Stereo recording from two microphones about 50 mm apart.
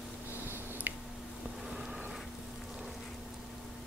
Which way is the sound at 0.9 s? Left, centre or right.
Right.